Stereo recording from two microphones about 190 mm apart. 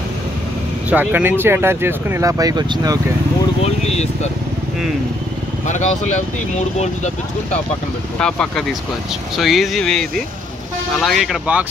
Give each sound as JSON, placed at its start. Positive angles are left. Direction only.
{"t": 0.8, "sound": "speech", "side_deg": -10}
{"t": 3.6, "sound": "speech", "side_deg": 35}
{"t": 5.7, "sound": "speech", "side_deg": 40}
{"t": 8.2, "sound": "speech", "side_deg": 5}